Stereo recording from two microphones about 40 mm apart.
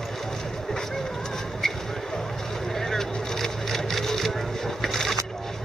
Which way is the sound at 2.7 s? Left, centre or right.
Centre.